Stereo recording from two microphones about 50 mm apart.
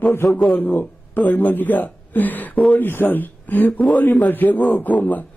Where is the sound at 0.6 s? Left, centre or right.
Left.